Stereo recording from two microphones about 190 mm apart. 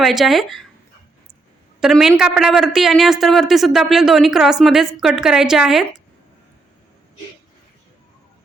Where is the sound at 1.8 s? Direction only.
Centre (ahead or behind).